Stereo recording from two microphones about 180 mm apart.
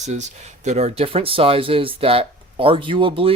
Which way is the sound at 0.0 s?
40° right (ahead or behind).